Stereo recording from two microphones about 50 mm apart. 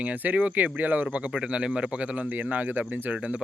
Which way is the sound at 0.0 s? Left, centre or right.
Right.